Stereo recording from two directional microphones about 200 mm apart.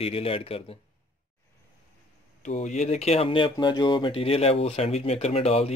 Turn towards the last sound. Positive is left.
turn(degrees=30)  # may be behind; listen again after turning